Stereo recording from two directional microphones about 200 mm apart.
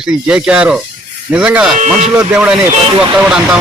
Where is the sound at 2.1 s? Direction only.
5° right (ahead or behind).